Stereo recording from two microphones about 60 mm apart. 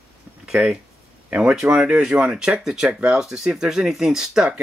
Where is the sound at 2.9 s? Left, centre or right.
Right.